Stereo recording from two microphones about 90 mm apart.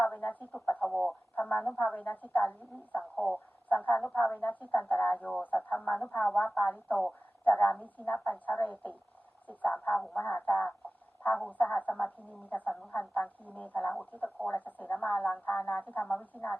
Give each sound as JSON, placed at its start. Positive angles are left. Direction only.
{"t": 0.0, "sound": "a sound", "side_deg": 20}
{"t": 0.9, "sound": "speech", "side_deg": 0}
{"t": 1.4, "sound": "a woman's voice", "side_deg": 15}
{"t": 3.2, "sound": "a woman's voice", "side_deg": 10}
{"t": 3.7, "sound": "a woman's voice", "side_deg": 20}